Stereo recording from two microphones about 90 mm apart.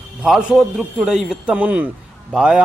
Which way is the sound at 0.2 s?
5° right (ahead or behind).